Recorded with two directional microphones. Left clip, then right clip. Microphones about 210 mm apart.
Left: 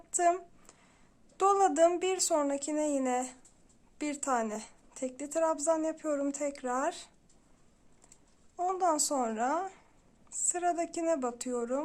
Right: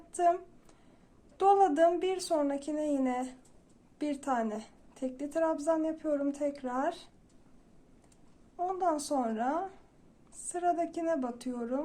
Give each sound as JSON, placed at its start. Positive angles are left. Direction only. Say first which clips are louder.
{"t": 0.1, "sound": "a woman's voice", "louder": "even", "side_deg": 30}
{"t": 8.5, "sound": "a woman's voice", "louder": "left 2 dB", "side_deg": 35}